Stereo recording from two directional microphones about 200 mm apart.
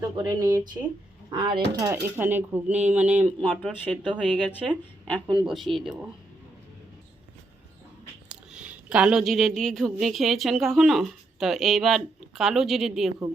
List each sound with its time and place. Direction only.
0.2 s speech: 20° right (ahead or behind)
1.8 s speech: 10° right (ahead or behind)
4.4 s speech: 5° left (ahead or behind)
5.2 s speech: 5° right (ahead or behind)
8.3 s a woman's voice: 5° right (ahead or behind)